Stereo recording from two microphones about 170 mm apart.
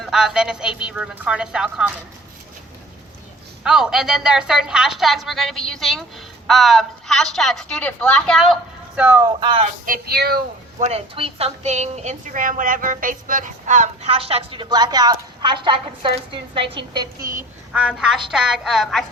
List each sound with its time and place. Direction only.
0.0 s a woman's voice: centre (ahead or behind)
3.6 s a woman's voice: 5° right (ahead or behind)
9.0 s speech: 10° right (ahead or behind)
9.4 s a woman's voice: 30° right (ahead or behind)
9.8 s a sound: 60° right (ahead or behind)
10.8 s a woman's voice: 35° right (ahead or behind)
14.1 s a woman's voice: 35° right (ahead or behind)
17.7 s a woman's voice: 5° right (ahead or behind)